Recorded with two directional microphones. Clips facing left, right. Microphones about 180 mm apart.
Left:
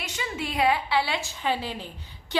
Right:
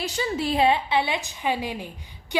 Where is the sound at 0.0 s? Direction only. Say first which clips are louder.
Right 6 dB; 35° right (ahead or behind).